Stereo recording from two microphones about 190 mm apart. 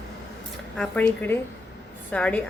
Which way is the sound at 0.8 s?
10° left (ahead or behind).